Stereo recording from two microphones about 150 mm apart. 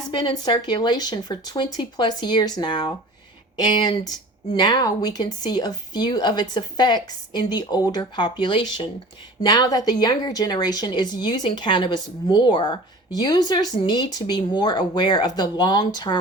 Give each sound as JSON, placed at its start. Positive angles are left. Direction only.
{"t": 0.1, "sound": "speech", "side_deg": 30}